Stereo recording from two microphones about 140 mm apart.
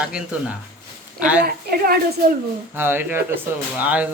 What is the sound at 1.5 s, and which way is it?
Speech, 90° right.